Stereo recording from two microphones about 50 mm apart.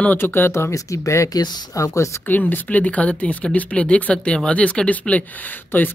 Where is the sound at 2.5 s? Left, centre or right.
Left.